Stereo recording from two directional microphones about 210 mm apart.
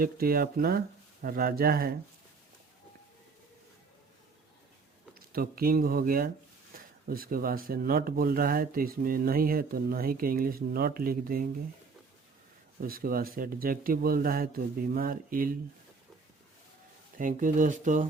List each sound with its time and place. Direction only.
0.0 s speech: 45° right (ahead or behind)
5.3 s speech: 45° right (ahead or behind)
12.8 s speech: 45° right (ahead or behind)
17.2 s speech: 40° right (ahead or behind)